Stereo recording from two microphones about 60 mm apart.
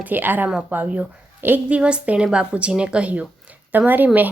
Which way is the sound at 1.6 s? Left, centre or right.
Right.